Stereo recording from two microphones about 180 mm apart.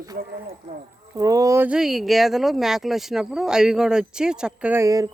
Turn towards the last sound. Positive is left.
turn(degrees=-15)  # may be behind; listen again after turning